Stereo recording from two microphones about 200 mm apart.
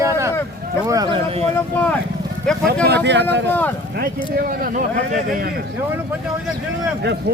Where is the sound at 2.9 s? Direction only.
60° right (ahead or behind).